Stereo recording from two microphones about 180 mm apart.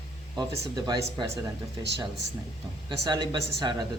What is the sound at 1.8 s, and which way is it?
Speech, 75° right (ahead or behind).